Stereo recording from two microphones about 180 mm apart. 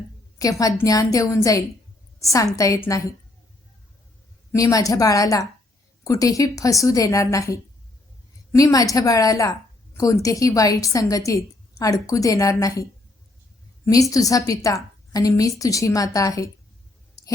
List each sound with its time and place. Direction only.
0.3 s a woman's voice: 20° left (ahead or behind)
4.5 s a woman's voice: 20° left (ahead or behind)